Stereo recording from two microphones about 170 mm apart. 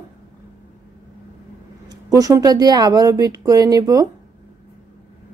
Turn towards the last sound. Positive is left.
turn(degrees=-20)  # may be behind; listen again after turning